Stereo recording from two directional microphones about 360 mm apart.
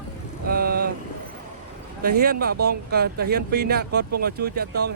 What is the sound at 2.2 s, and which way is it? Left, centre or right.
Speech, right.